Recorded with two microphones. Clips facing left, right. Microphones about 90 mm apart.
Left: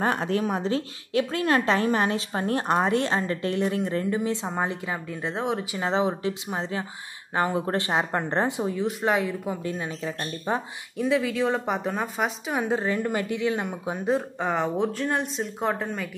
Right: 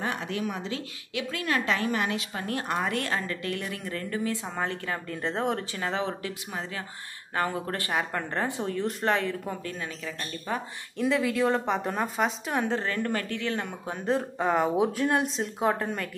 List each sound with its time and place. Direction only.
0.0 s a woman's voice: 40° left (ahead or behind); by 5.0 s 15° left (ahead or behind)
5.0 s speech: 5° left (ahead or behind)
5.8 s speech: 20° left (ahead or behind)
8.7 s speech: 5° left (ahead or behind)
9.6 s speech: 20° left (ahead or behind)
11.0 s speech: centre (ahead or behind)
14.1 s speech: centre (ahead or behind)